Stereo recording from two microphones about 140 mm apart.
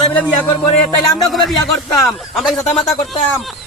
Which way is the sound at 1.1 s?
Centre (ahead or behind).